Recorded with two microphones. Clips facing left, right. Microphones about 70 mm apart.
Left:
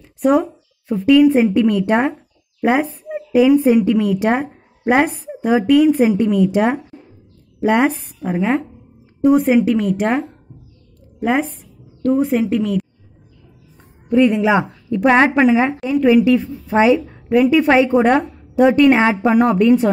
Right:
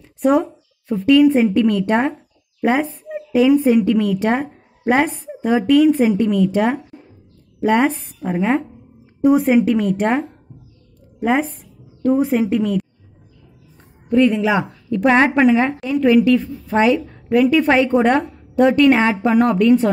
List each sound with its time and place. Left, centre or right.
0.0 s a sound: centre
1.4 s a woman's voice: centre
5.9 s a woman's voice: left
7.6 s a woman's voice: centre
14.2 s speech: left
14.9 s a woman's voice: centre